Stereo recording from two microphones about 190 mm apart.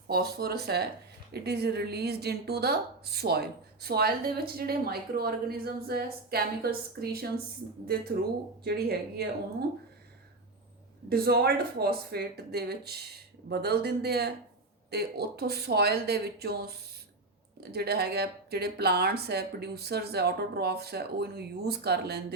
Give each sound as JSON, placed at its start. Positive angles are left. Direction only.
{"t": 0.1, "sound": "speech", "side_deg": -55}
{"t": 8.6, "sound": "speech", "side_deg": -55}
{"t": 11.1, "sound": "speech", "side_deg": -55}